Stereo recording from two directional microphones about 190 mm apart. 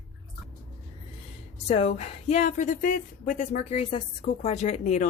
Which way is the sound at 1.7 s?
35° left (ahead or behind).